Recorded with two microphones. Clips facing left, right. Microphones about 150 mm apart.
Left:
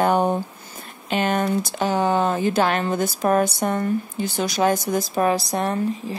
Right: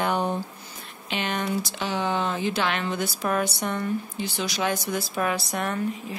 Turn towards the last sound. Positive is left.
turn(degrees=35)  # may be behind; listen again after turning